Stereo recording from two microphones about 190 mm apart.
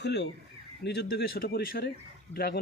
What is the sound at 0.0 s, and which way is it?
Speech, 60° left (ahead or behind).